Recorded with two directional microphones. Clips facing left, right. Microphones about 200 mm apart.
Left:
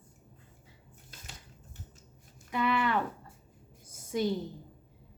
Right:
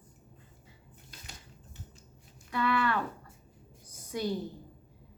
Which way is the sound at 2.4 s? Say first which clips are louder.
Even; 20° left (ahead or behind).